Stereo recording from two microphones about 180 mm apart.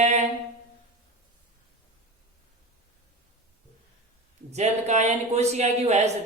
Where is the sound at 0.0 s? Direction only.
40° right (ahead or behind).